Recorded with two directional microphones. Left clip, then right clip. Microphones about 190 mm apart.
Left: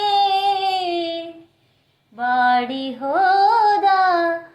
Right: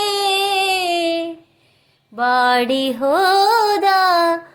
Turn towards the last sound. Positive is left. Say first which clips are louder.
# right 2 dB
turn(degrees=-50)  # may be behind; listen again after turning